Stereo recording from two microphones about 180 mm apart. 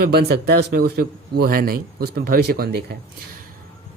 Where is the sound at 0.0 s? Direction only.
65° right (ahead or behind).